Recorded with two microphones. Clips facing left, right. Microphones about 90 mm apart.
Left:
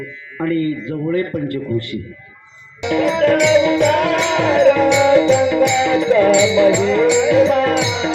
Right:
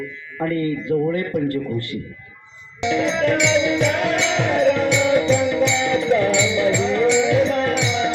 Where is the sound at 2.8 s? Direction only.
60° left (ahead or behind).